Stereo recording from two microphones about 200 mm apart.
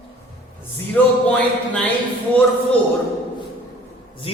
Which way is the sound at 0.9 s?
5° left (ahead or behind).